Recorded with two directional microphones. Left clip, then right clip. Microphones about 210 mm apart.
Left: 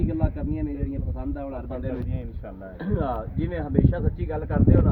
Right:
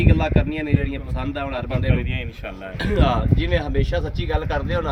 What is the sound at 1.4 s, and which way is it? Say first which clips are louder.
Speech: right 10 dB; 20° right (ahead or behind).